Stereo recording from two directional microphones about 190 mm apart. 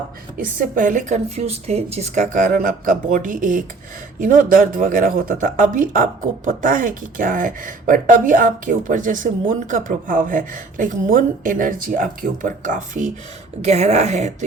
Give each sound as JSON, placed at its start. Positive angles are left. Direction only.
{"t": 0.3, "sound": "a woman's voice", "side_deg": -45}